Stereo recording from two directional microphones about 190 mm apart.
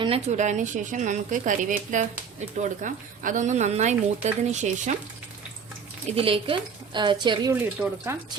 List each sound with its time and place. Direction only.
0.0 s speech: 35° right (ahead or behind)
6.1 s speech: 30° right (ahead or behind)
7.5 s speech: 10° right (ahead or behind)